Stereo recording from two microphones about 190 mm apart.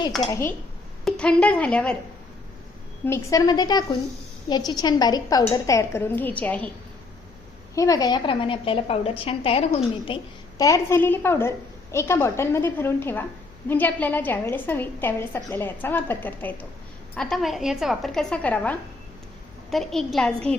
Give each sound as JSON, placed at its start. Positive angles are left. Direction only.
{"t": 0.2, "sound": "a woman's voice", "side_deg": 25}
{"t": 1.0, "sound": "speech", "side_deg": 5}
{"t": 3.1, "sound": "a woman's voice", "side_deg": 15}
{"t": 7.8, "sound": "a woman's voice", "side_deg": 20}
{"t": 10.6, "sound": "a woman's voice", "side_deg": 15}